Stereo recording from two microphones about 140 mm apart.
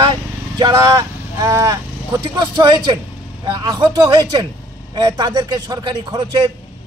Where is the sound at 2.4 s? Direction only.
30° right (ahead or behind).